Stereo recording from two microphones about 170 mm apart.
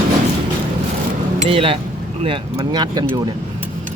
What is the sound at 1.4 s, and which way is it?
Speech, 35° right (ahead or behind).